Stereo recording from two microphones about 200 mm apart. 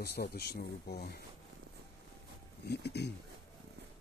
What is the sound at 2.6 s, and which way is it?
Speech, 55° left (ahead or behind).